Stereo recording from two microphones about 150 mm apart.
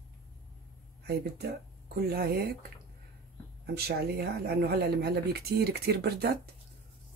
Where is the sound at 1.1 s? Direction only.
90° right.